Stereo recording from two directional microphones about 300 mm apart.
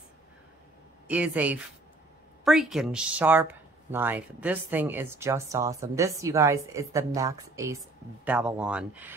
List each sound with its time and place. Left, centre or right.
1.0 s speech: centre